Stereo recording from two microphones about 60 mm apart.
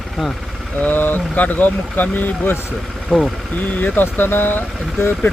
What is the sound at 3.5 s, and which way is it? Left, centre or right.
Speech, left.